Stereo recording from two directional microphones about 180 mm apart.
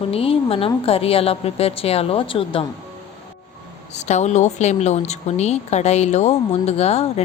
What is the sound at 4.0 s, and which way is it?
A woman's voice, 40° left (ahead or behind).